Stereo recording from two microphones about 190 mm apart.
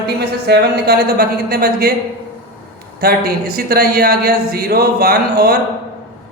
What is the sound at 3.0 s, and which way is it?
Speech, 55° right (ahead or behind).